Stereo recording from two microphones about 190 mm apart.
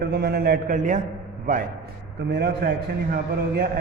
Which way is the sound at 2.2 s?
60° right (ahead or behind).